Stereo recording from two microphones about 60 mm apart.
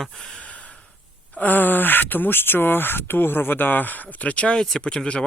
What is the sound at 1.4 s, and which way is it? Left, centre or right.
Speech, left.